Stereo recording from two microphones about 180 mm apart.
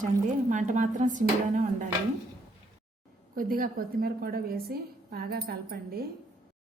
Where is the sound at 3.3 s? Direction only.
55° right (ahead or behind).